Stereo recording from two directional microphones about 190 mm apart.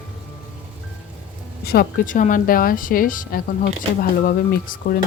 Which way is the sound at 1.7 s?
50° left (ahead or behind).